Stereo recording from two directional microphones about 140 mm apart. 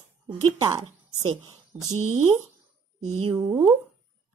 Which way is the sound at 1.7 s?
15° right (ahead or behind).